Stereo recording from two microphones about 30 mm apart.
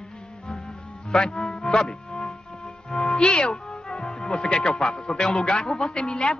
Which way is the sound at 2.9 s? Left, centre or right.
Left.